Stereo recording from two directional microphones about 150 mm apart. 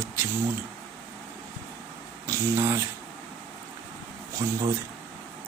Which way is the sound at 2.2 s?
15° right (ahead or behind).